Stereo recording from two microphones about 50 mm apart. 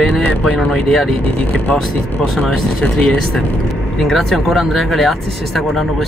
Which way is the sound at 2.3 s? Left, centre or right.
Centre.